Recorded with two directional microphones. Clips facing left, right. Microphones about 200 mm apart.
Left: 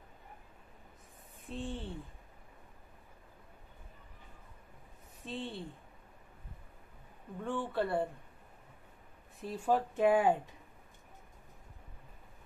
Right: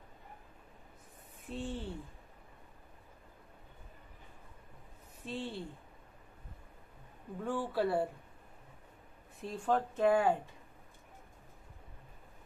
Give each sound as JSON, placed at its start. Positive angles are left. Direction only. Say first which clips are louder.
{"t": 1.5, "sound": "speech", "louder": "right 1 dB", "side_deg": 0}
{"t": 5.2, "sound": "speech", "louder": "right 1 dB", "side_deg": 0}
{"t": 7.3, "sound": "speech", "louder": "right 1 dB", "side_deg": -5}
{"t": 9.4, "sound": "speech", "louder": "left 1 dB", "side_deg": 5}